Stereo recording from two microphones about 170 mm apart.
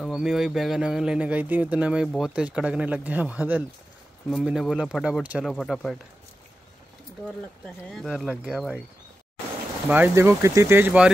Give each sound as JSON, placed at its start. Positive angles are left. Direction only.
{"t": 0.0, "sound": "speech", "side_deg": 0}
{"t": 7.2, "sound": "speech", "side_deg": 5}
{"t": 9.8, "sound": "speech", "side_deg": -10}